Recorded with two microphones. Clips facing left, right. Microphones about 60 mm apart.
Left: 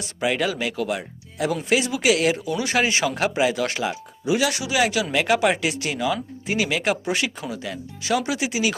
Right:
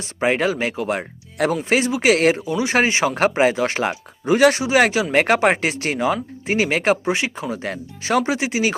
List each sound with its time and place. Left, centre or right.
0.0 s speech: right
2.4 s speech: right
3.8 s speech: right